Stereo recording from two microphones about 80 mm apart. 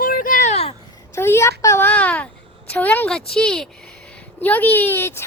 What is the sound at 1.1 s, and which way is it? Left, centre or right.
Speech, left.